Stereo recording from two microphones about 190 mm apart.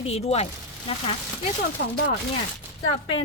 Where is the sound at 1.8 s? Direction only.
55° left (ahead or behind).